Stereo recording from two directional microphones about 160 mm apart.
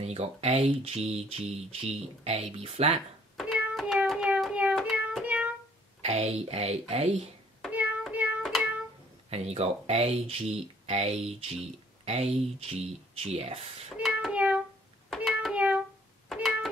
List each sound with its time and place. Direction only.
0.0 s speech: 40° right (ahead or behind)
3.3 s a sound: 5° right (ahead or behind)
4.7 s child singing: 5° right (ahead or behind)
6.0 s speech: 40° right (ahead or behind)
7.7 s child singing: 10° right (ahead or behind)
9.3 s speech: 40° right (ahead or behind)
13.9 s child singing: 5° right (ahead or behind)
15.0 s a sound: centre (ahead or behind)